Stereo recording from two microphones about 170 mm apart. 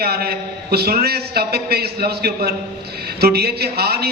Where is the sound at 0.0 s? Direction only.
70° right (ahead or behind).